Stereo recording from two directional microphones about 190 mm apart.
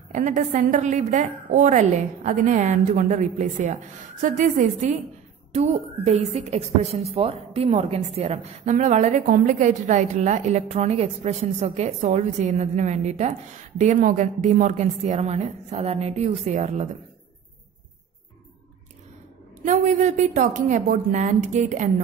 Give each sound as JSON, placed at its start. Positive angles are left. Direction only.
{"t": 0.1, "sound": "a woman's voice", "side_deg": -40}
{"t": 19.6, "sound": "a woman's voice", "side_deg": -40}